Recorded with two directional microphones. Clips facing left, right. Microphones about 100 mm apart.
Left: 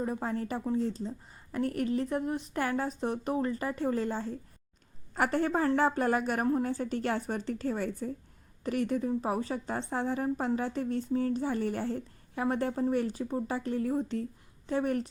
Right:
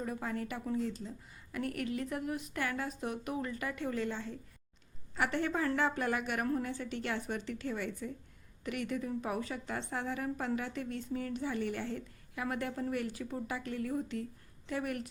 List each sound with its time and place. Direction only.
0.0 s a woman's voice: 30° left (ahead or behind)